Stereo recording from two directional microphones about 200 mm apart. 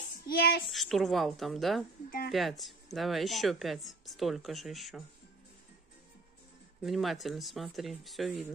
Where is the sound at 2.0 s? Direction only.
45° left (ahead or behind).